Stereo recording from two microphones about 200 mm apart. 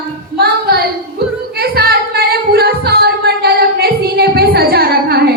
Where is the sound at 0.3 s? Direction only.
50° right (ahead or behind).